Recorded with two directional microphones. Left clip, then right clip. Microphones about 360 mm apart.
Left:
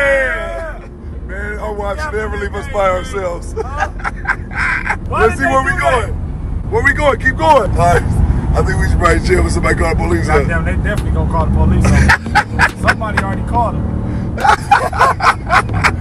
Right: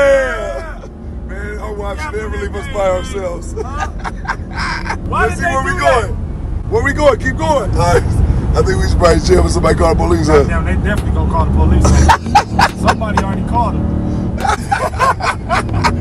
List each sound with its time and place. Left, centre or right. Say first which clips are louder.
0.0 s a sound: right 2 dB; centre
1.8 s speech: left 2 dB; centre
14.3 s bow-wow: left 6 dB; centre